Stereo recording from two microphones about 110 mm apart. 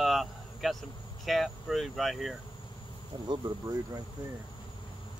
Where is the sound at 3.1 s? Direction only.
40° right (ahead or behind).